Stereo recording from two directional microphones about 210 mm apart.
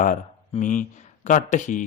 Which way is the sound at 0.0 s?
35° left (ahead or behind).